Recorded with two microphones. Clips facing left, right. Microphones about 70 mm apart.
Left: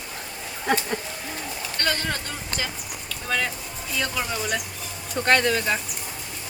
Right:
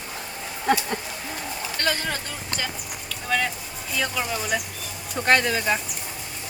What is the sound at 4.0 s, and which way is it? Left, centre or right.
Speech, centre.